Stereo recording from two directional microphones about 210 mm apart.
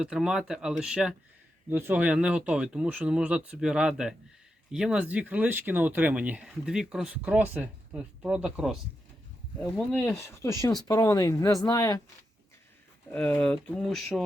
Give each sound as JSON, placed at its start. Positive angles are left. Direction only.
{"t": 0.0, "sound": "speech", "side_deg": -5}
{"t": 9.7, "sound": "speech", "side_deg": 10}
{"t": 13.1, "sound": "speech", "side_deg": 5}